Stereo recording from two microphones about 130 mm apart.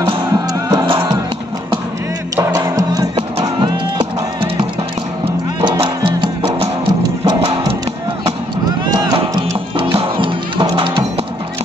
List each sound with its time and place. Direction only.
0.0 s music: 30° right (ahead or behind)
2.3 s music: 30° right (ahead or behind)
5.2 s music: 35° right (ahead or behind)
8.8 s music: 30° right (ahead or behind)